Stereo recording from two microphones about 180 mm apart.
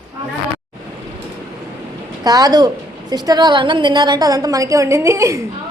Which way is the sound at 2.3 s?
20° right (ahead or behind).